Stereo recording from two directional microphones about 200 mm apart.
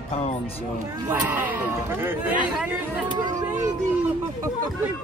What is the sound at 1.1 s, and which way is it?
A woman's voice, 10° right (ahead or behind).